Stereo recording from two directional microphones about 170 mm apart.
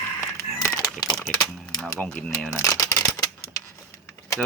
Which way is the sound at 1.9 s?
5° left (ahead or behind).